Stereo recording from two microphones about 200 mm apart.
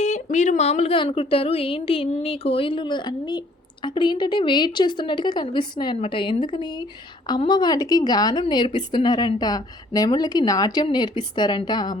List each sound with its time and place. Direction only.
0.0 s a woman's voice: 35° left (ahead or behind); by 11.9 s 20° left (ahead or behind)